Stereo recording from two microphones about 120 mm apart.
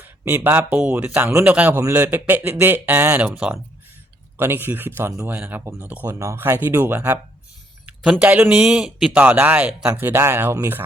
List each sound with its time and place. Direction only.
0.0 s speech: 20° right (ahead or behind)
8.2 s speech: 15° right (ahead or behind)